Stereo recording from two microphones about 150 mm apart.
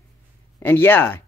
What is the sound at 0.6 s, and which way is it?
Speech, 15° left (ahead or behind).